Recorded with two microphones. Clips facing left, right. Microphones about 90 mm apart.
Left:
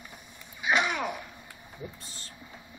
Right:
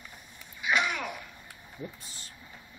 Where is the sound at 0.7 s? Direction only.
30° left (ahead or behind).